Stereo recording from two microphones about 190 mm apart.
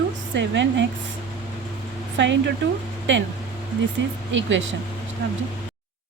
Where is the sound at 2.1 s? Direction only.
70° right (ahead or behind).